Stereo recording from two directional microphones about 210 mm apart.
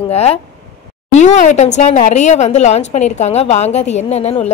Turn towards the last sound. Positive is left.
turn(degrees=30)  # may be behind; listen again after turning